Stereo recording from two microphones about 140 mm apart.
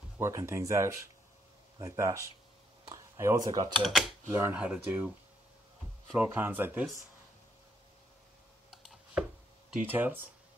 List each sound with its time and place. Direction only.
0.2 s speech: 20° right (ahead or behind)
3.8 s speech: centre (ahead or behind)
4.3 s speech: 15° right (ahead or behind)
6.1 s speech: 15° right (ahead or behind)
8.6 s computer keyboard: centre (ahead or behind)
9.7 s speech: 10° right (ahead or behind)